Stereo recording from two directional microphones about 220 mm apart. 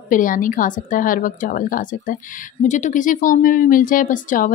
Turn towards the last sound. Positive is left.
turn(degrees=35)  # may be behind; listen again after turning